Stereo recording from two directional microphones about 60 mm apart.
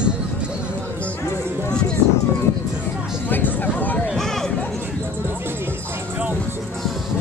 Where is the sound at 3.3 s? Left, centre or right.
Left.